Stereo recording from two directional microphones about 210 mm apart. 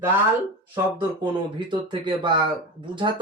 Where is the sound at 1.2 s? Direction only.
20° right (ahead or behind).